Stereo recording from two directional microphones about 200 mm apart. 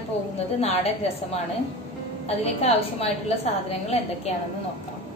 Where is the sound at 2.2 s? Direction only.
30° left (ahead or behind).